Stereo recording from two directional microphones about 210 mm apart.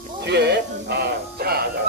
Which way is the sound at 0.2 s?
55° right (ahead or behind).